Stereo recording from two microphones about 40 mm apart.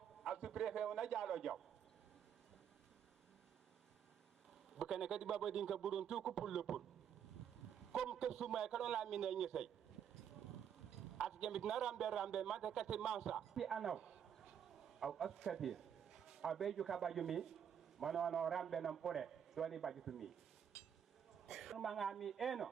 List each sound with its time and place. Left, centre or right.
0.4 s a man's voice: centre
4.8 s a man's voice: centre
7.9 s a man's voice: centre
11.3 s a man's voice: centre
13.9 s a sound: right
14.8 s a man's voice: centre
21.5 s a woman's voice: centre